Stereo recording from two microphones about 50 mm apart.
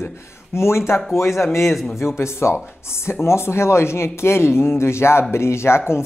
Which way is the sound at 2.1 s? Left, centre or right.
Left.